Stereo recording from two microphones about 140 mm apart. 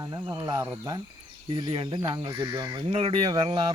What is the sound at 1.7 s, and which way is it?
Speech, 40° right (ahead or behind).